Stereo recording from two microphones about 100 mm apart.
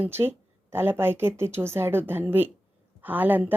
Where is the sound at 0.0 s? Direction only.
25° right (ahead or behind).